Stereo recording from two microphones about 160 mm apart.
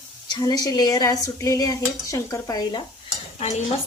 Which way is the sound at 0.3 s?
25° left (ahead or behind).